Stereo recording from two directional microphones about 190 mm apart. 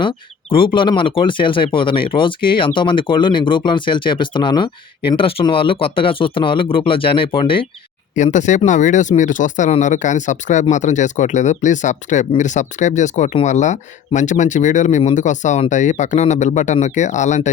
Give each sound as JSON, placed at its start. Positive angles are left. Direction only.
{"t": 0.5, "sound": "speech", "side_deg": 25}
{"t": 8.1, "sound": "speech", "side_deg": 40}